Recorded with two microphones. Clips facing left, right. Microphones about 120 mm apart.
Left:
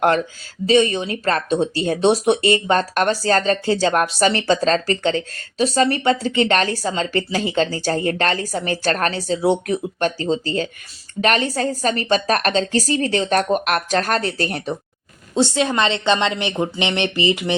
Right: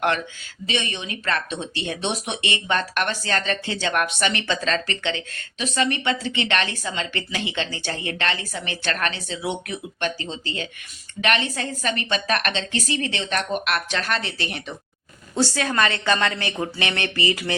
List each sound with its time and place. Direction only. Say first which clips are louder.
0.7 s speech: left 12 dB; 35° left (ahead or behind)
15.4 s a woman's voice: left 4 dB; 20° left (ahead or behind)